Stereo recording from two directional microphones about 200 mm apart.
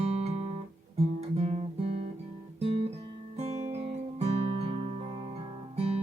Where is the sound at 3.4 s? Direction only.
35° right (ahead or behind).